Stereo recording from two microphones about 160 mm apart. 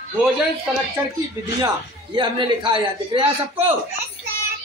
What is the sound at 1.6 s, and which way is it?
A man's voice, 30° right (ahead or behind).